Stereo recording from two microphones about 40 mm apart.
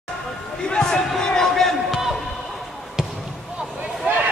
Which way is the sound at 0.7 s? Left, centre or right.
Centre.